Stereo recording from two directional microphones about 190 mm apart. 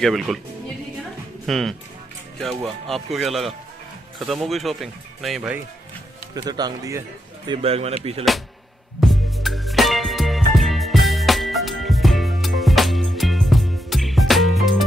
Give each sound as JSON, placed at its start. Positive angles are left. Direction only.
{"t": 0.0, "sound": "speech", "side_deg": 0}
{"t": 1.4, "sound": "speech", "side_deg": 0}
{"t": 6.3, "sound": "speech", "side_deg": -20}
{"t": 7.5, "sound": "speech", "side_deg": -30}
{"t": 9.0, "sound": "music", "side_deg": 0}